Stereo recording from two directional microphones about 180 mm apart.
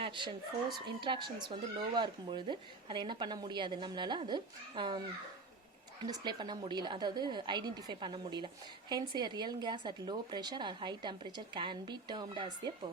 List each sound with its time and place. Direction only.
0.0 s a sound: 25° right (ahead or behind)
0.7 s speech: 25° right (ahead or behind)
6.1 s speech: 25° right (ahead or behind)